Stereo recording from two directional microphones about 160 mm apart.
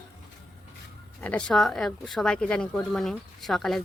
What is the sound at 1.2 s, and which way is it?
A woman's voice, 5° left (ahead or behind).